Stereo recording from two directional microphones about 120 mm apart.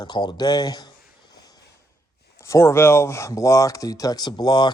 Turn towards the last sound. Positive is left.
turn(degrees=35)  # may be behind; listen again after turning